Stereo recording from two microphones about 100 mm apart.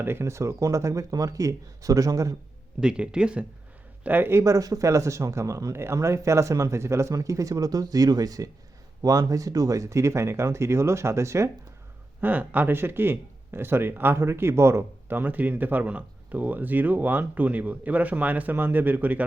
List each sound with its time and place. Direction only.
0.0 s speech: 25° right (ahead or behind)
2.8 s speech: 10° right (ahead or behind); by 11.5 s 30° right (ahead or behind)
12.2 s speech: 15° right (ahead or behind)